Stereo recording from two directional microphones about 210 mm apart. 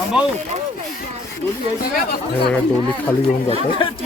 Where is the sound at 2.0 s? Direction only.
45° left (ahead or behind).